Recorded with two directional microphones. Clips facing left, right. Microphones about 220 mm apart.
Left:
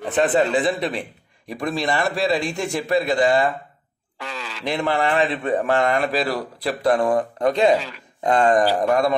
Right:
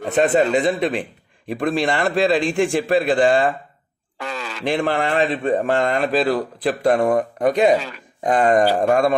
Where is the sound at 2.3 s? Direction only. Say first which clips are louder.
Right 6 dB; 90° right.